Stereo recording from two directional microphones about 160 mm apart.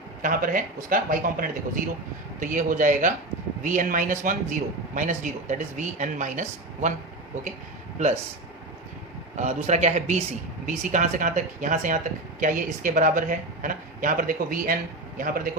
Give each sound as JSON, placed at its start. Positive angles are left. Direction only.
{"t": 0.2, "sound": "speech", "side_deg": -60}
{"t": 7.9, "sound": "speech", "side_deg": -45}
{"t": 9.3, "sound": "speech", "side_deg": -45}